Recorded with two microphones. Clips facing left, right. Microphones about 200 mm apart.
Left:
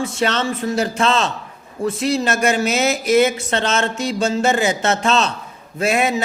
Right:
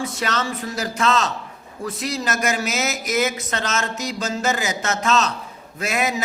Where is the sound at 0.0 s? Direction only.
25° left (ahead or behind).